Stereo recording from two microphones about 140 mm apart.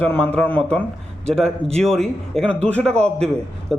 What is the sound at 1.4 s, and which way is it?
Speech, 50° right (ahead or behind).